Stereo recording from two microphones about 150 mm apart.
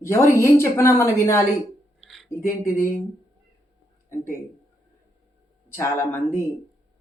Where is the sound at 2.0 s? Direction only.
Centre (ahead or behind).